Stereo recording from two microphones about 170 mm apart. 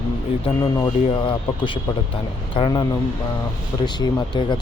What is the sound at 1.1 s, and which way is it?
Speech, 30° left (ahead or behind).